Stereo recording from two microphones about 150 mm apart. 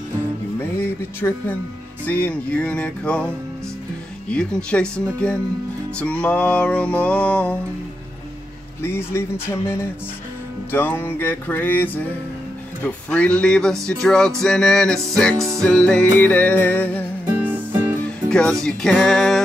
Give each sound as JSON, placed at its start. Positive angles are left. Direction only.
{"t": 0.6, "sound": "speech", "side_deg": 15}
{"t": 2.0, "sound": "music", "side_deg": 10}
{"t": 4.3, "sound": "music", "side_deg": 5}
{"t": 8.8, "sound": "music", "side_deg": 15}
{"t": 12.8, "sound": "speech", "side_deg": 10}
{"t": 15.3, "sound": "music", "side_deg": -20}
{"t": 15.6, "sound": "music", "side_deg": 5}
{"t": 17.4, "sound": "music", "side_deg": -10}
{"t": 18.3, "sound": "speech", "side_deg": 5}